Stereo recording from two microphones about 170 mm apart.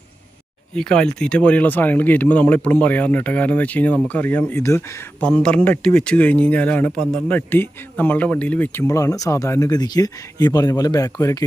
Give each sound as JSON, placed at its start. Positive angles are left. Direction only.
{"t": 0.7, "sound": "speech", "side_deg": 5}
{"t": 5.2, "sound": "speech", "side_deg": 5}